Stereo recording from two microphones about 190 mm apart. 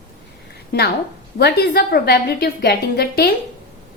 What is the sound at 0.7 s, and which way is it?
A woman's voice, 55° left (ahead or behind).